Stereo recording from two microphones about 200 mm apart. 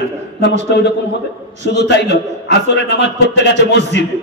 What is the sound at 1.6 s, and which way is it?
A man's voice, 60° left (ahead or behind).